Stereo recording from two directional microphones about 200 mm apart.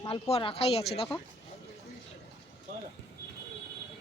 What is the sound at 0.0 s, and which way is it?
Speech, 30° left (ahead or behind).